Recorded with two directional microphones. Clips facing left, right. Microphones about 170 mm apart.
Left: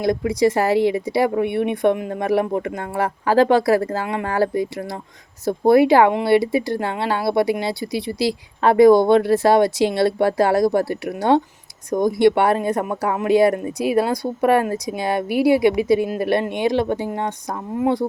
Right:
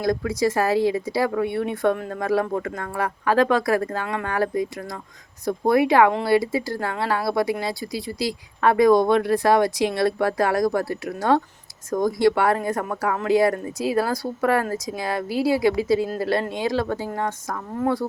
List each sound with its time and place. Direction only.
0.0 s speech: 20° left (ahead or behind)